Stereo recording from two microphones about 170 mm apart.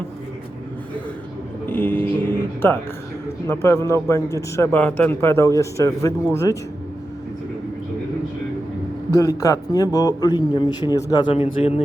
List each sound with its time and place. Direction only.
1.6 s music: 10° left (ahead or behind)
3.4 s a man's voice: 15° left (ahead or behind)
9.1 s a man's voice: 20° left (ahead or behind); by 11.8 s 35° left (ahead or behind)